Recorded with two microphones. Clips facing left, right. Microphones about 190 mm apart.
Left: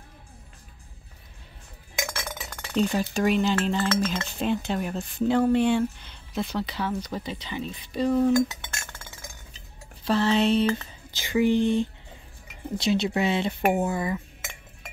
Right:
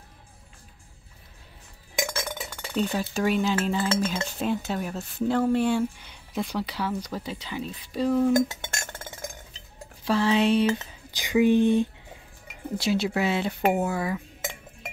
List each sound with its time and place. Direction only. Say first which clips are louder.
2.5 s speech: left 3 dB; centre (ahead or behind)
8.5 s a sound: right 4 dB; 50° right (ahead or behind)
10.0 s speech: even; 10° right (ahead or behind)